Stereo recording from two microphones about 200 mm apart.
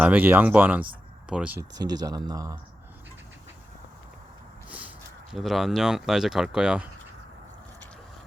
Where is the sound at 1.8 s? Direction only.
20° right (ahead or behind).